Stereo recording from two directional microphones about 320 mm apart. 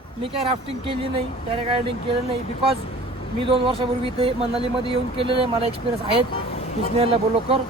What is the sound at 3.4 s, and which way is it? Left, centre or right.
Speech, centre.